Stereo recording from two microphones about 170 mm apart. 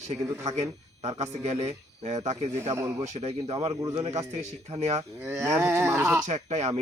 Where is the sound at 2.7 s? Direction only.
15° right (ahead or behind).